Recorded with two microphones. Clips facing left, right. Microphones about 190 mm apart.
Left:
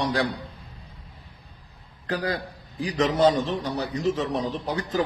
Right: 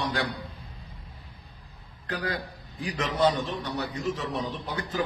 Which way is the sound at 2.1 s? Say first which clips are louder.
Left 4 dB; 35° left (ahead or behind).